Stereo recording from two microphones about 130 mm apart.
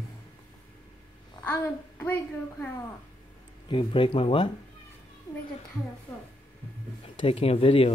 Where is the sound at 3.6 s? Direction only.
40° left (ahead or behind).